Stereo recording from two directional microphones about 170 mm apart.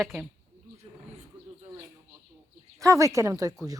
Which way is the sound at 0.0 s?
Centre (ahead or behind).